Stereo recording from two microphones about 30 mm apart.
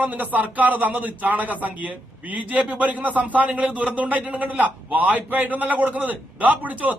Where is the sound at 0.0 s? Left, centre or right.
Right.